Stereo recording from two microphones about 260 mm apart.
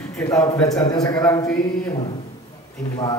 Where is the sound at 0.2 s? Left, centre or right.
Centre.